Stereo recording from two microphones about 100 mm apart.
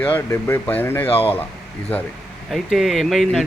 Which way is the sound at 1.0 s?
70° left (ahead or behind).